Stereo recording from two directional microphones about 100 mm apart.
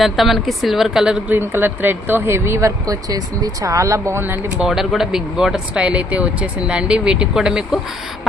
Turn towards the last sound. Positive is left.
turn(degrees=-5)  # may be behind; listen again after turning